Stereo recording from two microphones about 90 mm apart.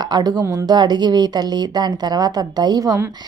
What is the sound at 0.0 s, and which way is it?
A woman's voice, 50° right (ahead or behind).